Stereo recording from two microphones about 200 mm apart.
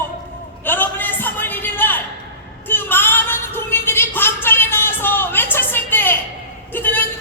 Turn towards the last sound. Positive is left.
turn(degrees=10)  # may be behind; listen again after turning